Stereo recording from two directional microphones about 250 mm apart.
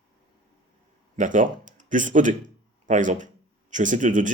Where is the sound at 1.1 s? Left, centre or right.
Right.